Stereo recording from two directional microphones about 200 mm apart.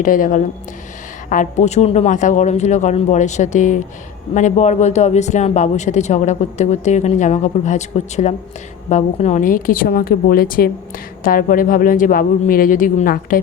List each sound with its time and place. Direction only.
0.0 s a woman's voice: 40° left (ahead or behind)